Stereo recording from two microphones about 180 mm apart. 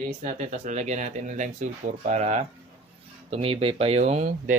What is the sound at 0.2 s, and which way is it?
Speech, 40° right (ahead or behind).